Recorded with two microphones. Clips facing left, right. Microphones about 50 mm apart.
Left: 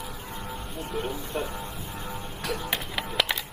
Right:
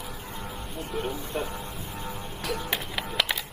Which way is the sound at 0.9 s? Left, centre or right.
Centre.